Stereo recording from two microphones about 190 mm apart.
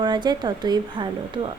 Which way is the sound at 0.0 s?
25° right (ahead or behind).